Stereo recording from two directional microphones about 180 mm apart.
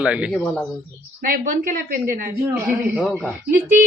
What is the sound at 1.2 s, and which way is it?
A woman's voice, 50° right (ahead or behind).